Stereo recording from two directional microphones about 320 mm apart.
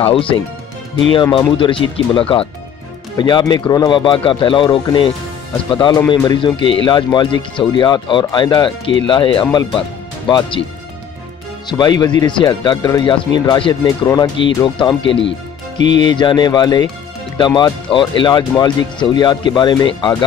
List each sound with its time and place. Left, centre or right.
0.0 s speech: centre
11.7 s speech: centre